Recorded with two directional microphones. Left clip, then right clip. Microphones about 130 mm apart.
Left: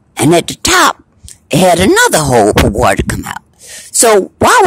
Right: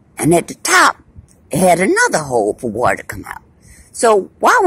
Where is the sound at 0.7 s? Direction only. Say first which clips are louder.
Left 2 dB; 45° left (ahead or behind).